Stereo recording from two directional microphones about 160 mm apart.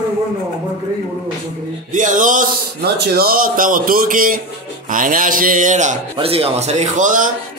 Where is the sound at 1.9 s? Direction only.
55° right (ahead or behind).